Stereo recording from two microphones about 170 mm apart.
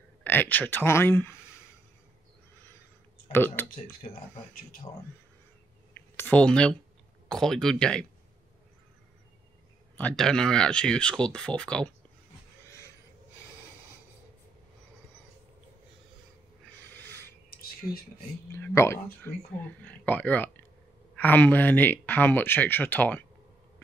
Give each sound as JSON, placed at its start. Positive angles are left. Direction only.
{"t": 0.2, "sound": "speech", "side_deg": 10}
{"t": 3.3, "sound": "speech", "side_deg": 10}
{"t": 4.9, "sound": "speech", "side_deg": 20}
{"t": 5.9, "sound": "clicking", "side_deg": 10}
{"t": 7.2, "sound": "speech", "side_deg": 5}
{"t": 9.9, "sound": "speech", "side_deg": 5}
{"t": 16.8, "sound": "owl", "side_deg": 10}
{"t": 17.5, "sound": "a sound", "side_deg": 60}
{"t": 18.5, "sound": "speech", "side_deg": 15}